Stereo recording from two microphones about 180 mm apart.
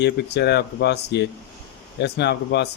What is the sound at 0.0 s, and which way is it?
Speech, 65° left (ahead or behind).